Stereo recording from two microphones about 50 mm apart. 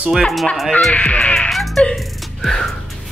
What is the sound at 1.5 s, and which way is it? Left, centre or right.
Music, centre.